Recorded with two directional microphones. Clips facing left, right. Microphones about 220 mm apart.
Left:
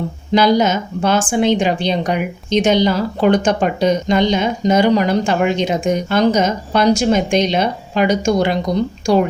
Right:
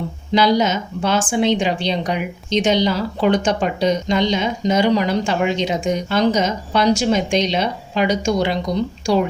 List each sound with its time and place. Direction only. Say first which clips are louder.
0.3 s a woman's voice: left 3 dB; 50° left (ahead or behind)